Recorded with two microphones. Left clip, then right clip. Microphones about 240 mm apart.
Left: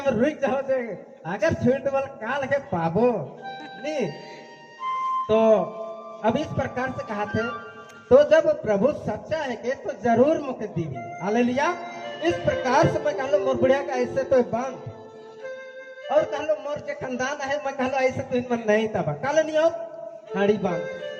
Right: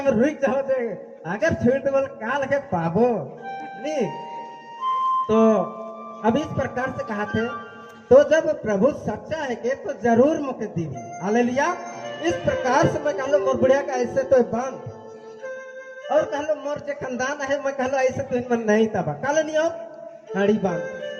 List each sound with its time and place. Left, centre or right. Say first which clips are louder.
0.0 s a man's voice: right 2 dB; right
5.3 s a man's voice: left 3 dB; right
16.0 s a man's voice: right 1 dB; right